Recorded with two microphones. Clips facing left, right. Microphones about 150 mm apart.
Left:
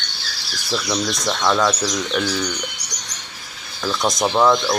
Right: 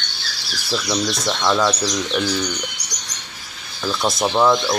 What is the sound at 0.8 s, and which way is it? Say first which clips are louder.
Speech: right 1 dB; 10° right (ahead or behind).